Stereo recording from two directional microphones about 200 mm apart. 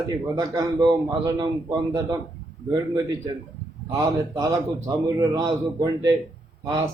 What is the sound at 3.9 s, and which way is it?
A man's voice, 15° right (ahead or behind).